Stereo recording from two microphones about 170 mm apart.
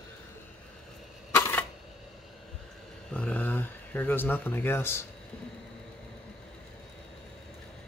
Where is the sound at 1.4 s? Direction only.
10° left (ahead or behind).